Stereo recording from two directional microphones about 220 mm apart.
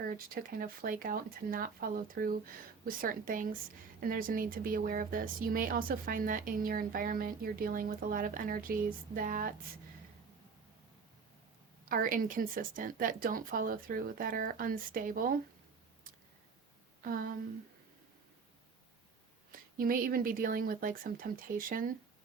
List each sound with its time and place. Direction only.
0.0 s speech: 40° right (ahead or behind)
11.9 s speech: 40° right (ahead or behind)
17.0 s speech: 40° right (ahead or behind)
19.5 s speech: 40° right (ahead or behind)